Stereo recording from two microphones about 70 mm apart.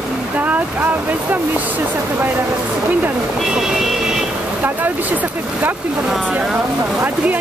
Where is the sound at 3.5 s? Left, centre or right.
Centre.